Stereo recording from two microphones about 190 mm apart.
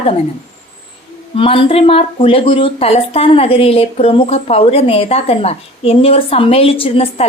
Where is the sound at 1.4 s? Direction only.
30° left (ahead or behind).